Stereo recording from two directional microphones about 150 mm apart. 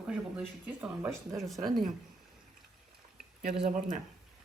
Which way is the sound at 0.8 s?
Centre (ahead or behind).